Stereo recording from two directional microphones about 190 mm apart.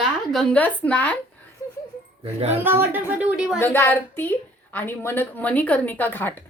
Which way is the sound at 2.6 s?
10° right (ahead or behind).